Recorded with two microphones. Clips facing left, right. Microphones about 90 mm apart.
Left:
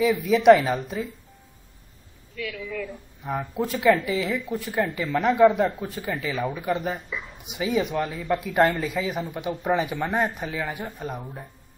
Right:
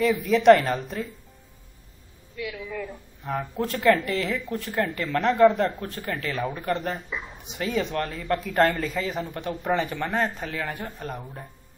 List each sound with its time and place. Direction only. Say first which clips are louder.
0.0 s speech: left 1 dB; centre (ahead or behind)
2.3 s speech: left 1 dB; 30° right (ahead or behind)
3.3 s speech: left 1 dB; 5° left (ahead or behind)